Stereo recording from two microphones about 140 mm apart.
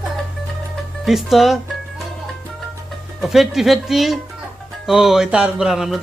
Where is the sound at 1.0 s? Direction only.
Centre (ahead or behind).